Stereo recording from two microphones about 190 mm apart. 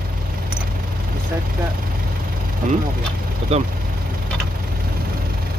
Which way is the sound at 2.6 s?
45° right (ahead or behind).